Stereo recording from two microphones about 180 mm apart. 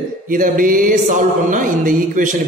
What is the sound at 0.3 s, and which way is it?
A man's voice, 50° right (ahead or behind).